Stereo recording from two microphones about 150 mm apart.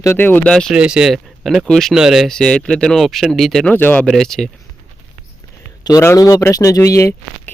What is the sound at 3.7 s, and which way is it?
Speech, 10° left (ahead or behind).